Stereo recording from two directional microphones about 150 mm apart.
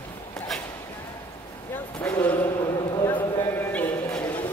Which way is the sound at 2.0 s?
10° left (ahead or behind).